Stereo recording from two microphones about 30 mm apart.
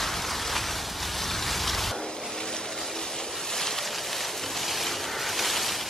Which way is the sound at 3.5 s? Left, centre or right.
Centre.